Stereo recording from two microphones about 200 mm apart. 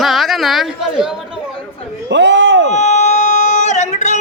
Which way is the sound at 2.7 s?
35° left (ahead or behind).